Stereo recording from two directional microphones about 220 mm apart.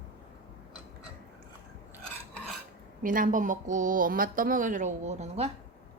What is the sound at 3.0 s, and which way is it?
Speech, 35° right (ahead or behind).